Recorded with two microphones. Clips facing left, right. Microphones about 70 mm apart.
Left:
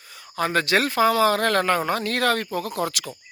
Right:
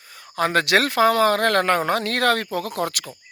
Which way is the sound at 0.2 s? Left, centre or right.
Right.